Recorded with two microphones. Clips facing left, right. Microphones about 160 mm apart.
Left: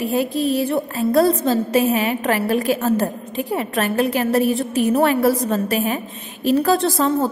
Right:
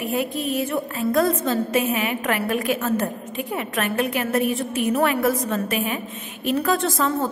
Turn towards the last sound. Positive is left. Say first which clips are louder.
# left 4 dB
turn(degrees=35)  # may be behind; listen again after turning